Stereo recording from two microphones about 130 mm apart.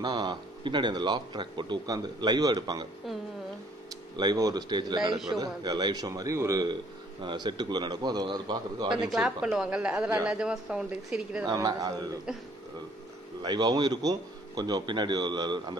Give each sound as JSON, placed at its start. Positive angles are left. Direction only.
{"t": 0.0, "sound": "a man's voice", "side_deg": -35}
{"t": 4.2, "sound": "a man's voice", "side_deg": -30}
{"t": 9.1, "sound": "speech", "side_deg": -5}
{"t": 11.4, "sound": "a man's voice", "side_deg": -30}
{"t": 13.4, "sound": "a man's voice", "side_deg": -30}